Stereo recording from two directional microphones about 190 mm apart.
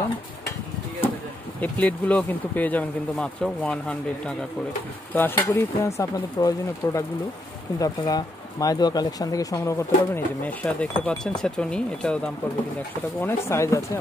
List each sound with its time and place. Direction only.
1.6 s speech: 10° left (ahead or behind)
5.1 s speech: 10° left (ahead or behind)
13.2 s speech: 15° left (ahead or behind)